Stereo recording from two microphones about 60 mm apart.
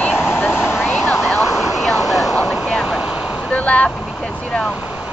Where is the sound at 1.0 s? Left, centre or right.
Centre.